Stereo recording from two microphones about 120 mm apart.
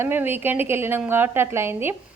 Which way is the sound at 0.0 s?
15° right (ahead or behind).